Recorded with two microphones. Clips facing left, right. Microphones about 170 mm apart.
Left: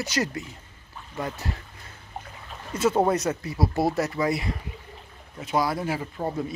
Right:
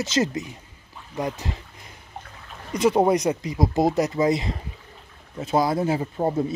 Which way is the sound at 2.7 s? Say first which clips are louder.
Right 3 dB; 15° right (ahead or behind).